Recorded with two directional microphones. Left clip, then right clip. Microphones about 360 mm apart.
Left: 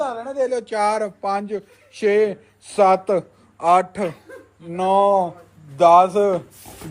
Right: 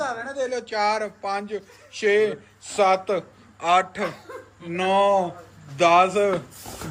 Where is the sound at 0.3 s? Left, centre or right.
Left.